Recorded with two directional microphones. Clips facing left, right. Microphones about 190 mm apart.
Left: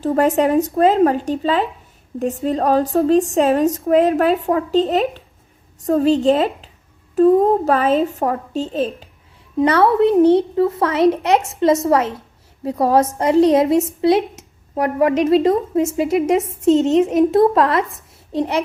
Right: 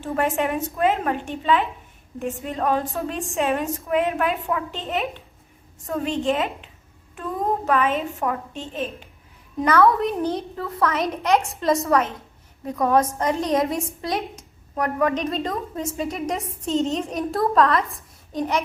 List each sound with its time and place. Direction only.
0.0 s a woman's voice: 40° left (ahead or behind)